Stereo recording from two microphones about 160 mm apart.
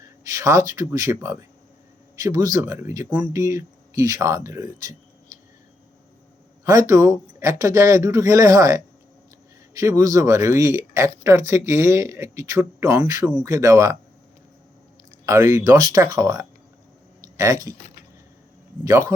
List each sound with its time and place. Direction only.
0.3 s speech: 20° right (ahead or behind)
6.7 s speech: 20° right (ahead or behind)
15.3 s speech: 15° right (ahead or behind)
17.2 s a sound: 20° right (ahead or behind)
18.9 s speech: 20° right (ahead or behind)